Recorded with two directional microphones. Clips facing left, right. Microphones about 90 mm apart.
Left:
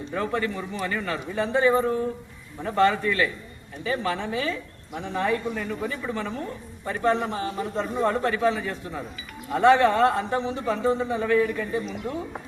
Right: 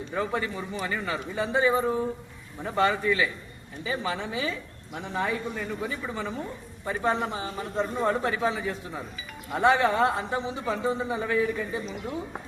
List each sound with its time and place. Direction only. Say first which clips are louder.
0.1 s a man's voice: left 2 dB; 10° right (ahead or behind)